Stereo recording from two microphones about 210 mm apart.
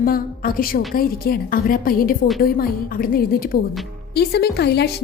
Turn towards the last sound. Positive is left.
turn(degrees=50)  # may be behind; listen again after turning